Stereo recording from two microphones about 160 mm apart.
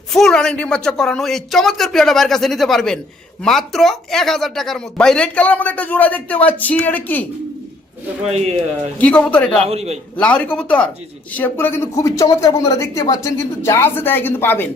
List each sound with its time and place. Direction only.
0.1 s a man's voice: centre (ahead or behind)
8.2 s speech: 40° right (ahead or behind)
9.0 s speech: 5° left (ahead or behind)
9.6 s speech: 40° right (ahead or behind)
10.2 s speech: 10° left (ahead or behind)